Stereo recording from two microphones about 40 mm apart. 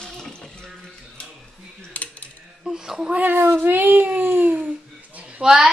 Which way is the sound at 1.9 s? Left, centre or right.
Left.